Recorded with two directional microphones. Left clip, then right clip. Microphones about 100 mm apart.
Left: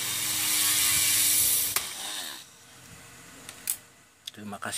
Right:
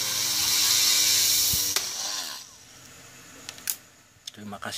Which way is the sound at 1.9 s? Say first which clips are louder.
Right 4 dB; 5° right (ahead or behind).